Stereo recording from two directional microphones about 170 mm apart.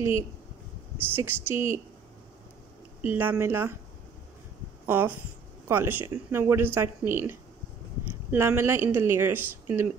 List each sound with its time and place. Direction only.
1.1 s speech: 15° right (ahead or behind)
3.0 s speech: 10° right (ahead or behind)
4.8 s speech: 10° right (ahead or behind)